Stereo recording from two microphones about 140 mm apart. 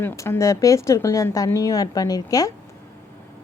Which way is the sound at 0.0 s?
15° left (ahead or behind).